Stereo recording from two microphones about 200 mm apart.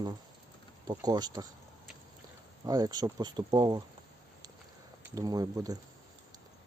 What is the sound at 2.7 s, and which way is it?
Speech, 20° right (ahead or behind).